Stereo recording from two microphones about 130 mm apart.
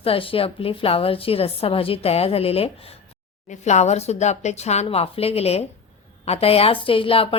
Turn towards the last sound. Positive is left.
turn(degrees=45)  # may be behind; listen again after turning